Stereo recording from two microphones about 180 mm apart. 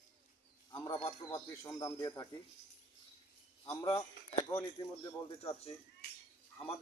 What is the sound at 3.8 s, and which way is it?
Speech, 30° left (ahead or behind).